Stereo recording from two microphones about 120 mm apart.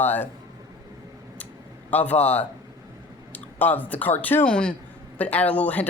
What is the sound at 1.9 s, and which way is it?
Speech, 15° left (ahead or behind).